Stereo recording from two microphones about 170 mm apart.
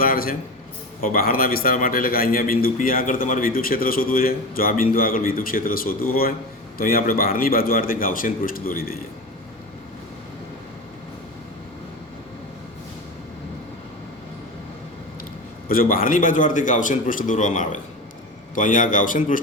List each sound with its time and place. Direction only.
0.0 s a man's voice: 60° left (ahead or behind)
15.7 s a man's voice: 60° left (ahead or behind)